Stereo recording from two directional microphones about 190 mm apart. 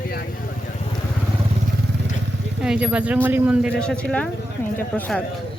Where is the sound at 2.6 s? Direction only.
5° right (ahead or behind).